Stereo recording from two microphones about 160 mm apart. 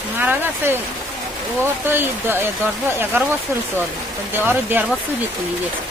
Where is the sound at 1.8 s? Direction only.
15° right (ahead or behind).